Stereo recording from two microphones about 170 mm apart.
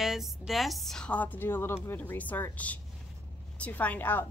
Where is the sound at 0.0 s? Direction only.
Centre (ahead or behind).